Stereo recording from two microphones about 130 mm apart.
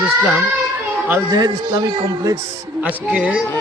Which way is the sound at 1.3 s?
30° right (ahead or behind).